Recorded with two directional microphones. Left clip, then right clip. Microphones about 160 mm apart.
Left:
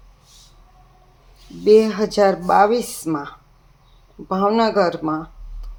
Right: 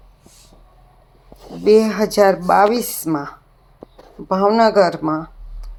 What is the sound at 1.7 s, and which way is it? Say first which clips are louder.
Speech: even; 20° right (ahead or behind).